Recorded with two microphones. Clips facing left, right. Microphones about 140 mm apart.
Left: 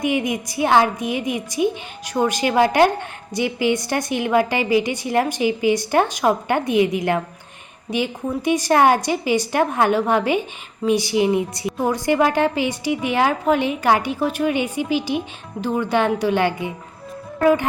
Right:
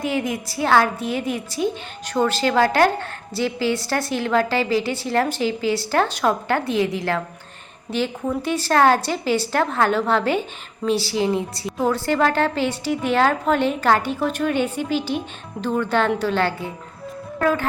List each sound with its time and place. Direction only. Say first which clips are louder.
0.0 s a woman's voice: left 2 dB; 15° left (ahead or behind)